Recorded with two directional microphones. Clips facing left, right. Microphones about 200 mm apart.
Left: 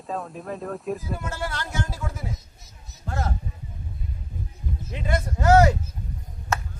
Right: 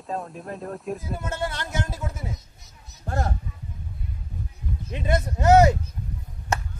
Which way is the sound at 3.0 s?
45° right (ahead or behind).